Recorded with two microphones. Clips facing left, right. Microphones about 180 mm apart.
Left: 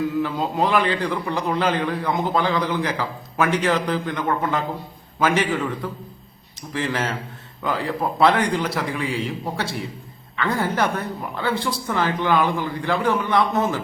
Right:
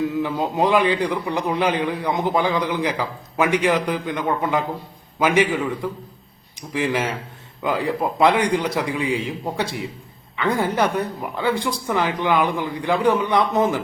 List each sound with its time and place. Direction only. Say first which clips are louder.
0.2 s a man's voice: right 1 dB; 20° right (ahead or behind)